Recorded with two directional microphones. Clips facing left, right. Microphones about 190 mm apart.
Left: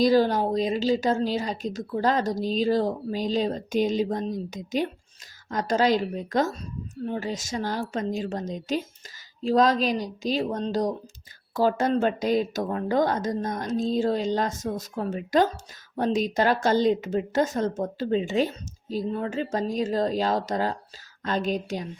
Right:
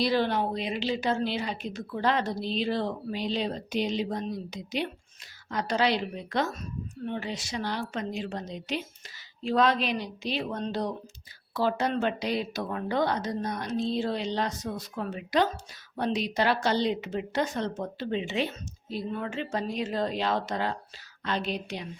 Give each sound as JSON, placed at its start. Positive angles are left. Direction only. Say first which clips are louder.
{"t": 0.0, "sound": "a woman's voice", "louder": "left 6 dB", "side_deg": 40}